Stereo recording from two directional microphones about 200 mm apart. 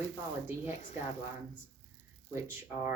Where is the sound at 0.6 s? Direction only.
35° left (ahead or behind).